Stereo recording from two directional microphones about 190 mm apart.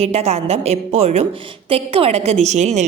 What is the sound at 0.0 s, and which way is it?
A woman's voice, 35° right (ahead or behind).